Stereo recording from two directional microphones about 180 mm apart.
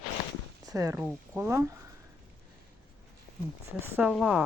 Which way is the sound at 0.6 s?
20° right (ahead or behind).